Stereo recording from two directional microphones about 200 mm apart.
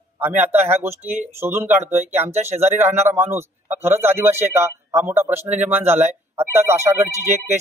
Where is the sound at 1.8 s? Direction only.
35° right (ahead or behind).